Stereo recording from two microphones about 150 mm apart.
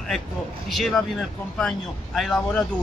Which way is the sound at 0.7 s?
Centre (ahead or behind).